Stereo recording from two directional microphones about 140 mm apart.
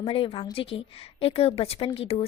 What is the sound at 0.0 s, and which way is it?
A woman's voice, 40° left (ahead or behind).